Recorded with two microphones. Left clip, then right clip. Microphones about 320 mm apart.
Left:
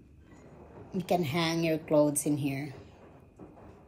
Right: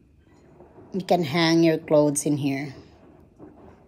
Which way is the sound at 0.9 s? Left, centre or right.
Right.